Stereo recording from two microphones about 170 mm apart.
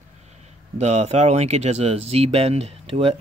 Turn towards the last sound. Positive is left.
turn(degrees=-35)  # may be behind; listen again after turning